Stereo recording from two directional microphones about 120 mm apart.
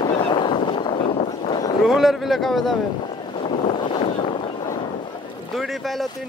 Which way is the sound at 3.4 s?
50° left (ahead or behind).